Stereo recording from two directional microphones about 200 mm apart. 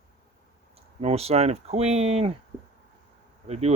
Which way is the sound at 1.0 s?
30° right (ahead or behind).